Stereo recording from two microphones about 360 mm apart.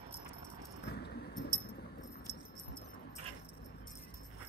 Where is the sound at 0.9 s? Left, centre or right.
Left.